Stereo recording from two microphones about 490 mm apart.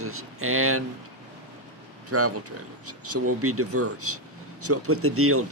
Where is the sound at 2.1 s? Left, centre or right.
Right.